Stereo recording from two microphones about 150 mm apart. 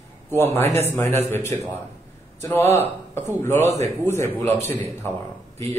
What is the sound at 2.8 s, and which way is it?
A man's voice, 15° left (ahead or behind).